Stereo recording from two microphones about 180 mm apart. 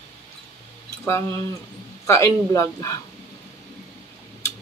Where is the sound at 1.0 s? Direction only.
15° left (ahead or behind).